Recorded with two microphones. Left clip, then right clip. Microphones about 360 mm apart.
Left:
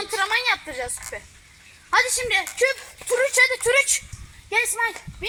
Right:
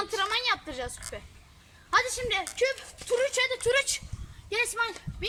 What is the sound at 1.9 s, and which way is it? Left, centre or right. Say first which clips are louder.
Speech: left 6 dB; centre.